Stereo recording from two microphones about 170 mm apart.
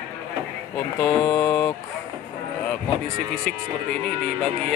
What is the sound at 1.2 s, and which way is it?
Mantra, 20° left (ahead or behind).